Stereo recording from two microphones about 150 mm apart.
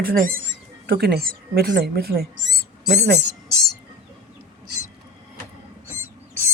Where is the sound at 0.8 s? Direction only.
90° right.